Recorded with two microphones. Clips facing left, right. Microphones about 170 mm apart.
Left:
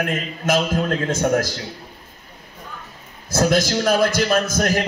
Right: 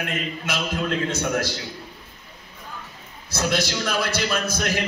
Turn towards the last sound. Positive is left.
turn(degrees=45)  # may be behind; listen again after turning